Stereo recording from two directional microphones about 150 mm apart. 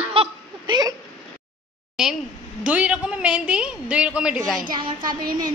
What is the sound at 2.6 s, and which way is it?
A woman's voice, 10° right (ahead or behind).